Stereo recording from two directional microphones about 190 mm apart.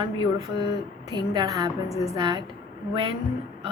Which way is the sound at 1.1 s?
20° right (ahead or behind).